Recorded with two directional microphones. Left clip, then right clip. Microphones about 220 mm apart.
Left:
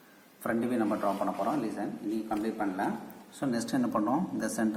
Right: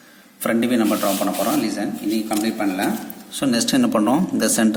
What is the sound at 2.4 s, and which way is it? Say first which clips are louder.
A man's voice: right 10 dB; 60° right (ahead or behind).